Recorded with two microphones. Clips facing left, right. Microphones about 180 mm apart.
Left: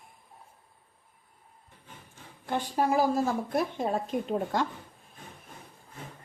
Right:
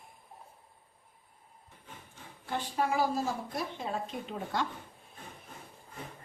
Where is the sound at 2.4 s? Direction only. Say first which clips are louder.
Left 4 dB; 40° left (ahead or behind).